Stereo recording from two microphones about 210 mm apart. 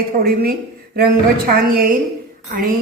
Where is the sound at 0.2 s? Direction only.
45° right (ahead or behind).